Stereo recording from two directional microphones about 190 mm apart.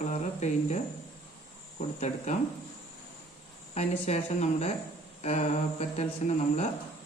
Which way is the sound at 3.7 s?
35° left (ahead or behind).